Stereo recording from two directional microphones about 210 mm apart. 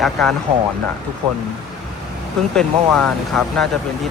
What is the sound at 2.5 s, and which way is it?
Speech, 5° left (ahead or behind).